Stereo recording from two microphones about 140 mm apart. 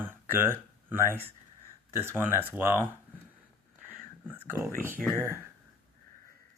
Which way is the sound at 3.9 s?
15° right (ahead or behind).